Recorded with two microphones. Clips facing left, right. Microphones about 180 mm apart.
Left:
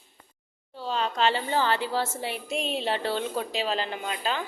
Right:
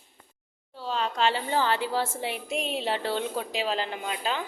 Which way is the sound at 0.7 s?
5° right (ahead or behind).